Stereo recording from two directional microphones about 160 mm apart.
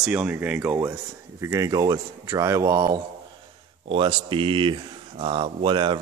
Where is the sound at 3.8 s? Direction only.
35° right (ahead or behind).